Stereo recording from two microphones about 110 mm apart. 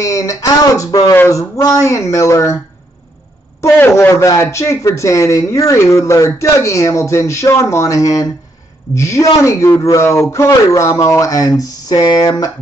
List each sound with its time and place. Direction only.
0.0 s speech: 30° left (ahead or behind)
3.6 s speech: 20° left (ahead or behind)